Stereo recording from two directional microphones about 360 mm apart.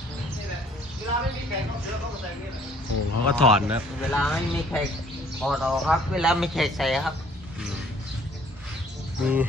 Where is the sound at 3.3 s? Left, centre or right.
Centre.